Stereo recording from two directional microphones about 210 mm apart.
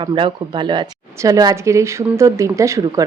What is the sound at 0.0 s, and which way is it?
Speech, 25° right (ahead or behind).